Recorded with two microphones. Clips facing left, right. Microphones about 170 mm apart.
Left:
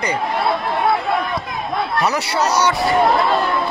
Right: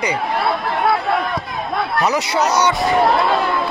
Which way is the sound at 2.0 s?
15° right (ahead or behind).